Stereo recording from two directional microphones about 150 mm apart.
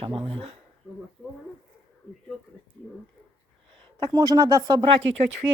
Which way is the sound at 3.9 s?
25° right (ahead or behind).